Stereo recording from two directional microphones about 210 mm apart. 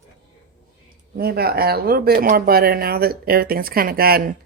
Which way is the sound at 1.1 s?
50° right (ahead or behind).